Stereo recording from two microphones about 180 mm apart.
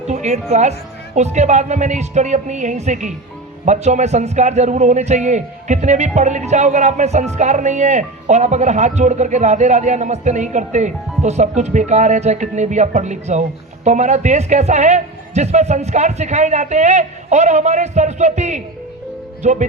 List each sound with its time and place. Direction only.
0.1 s a man's voice: 40° right (ahead or behind)